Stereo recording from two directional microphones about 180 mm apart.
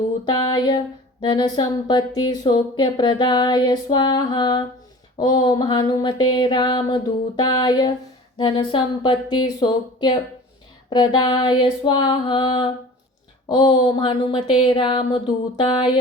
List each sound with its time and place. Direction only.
0.3 s speech: 25° left (ahead or behind)